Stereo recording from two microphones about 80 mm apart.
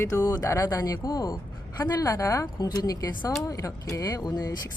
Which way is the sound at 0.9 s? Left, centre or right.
Left.